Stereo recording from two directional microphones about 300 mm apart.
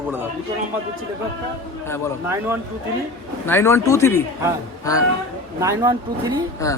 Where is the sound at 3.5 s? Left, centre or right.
Centre.